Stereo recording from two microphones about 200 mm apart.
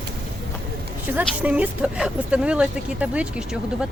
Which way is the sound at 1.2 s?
5° right (ahead or behind).